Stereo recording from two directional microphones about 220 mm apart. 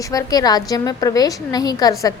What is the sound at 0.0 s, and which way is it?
A woman's voice, 15° left (ahead or behind).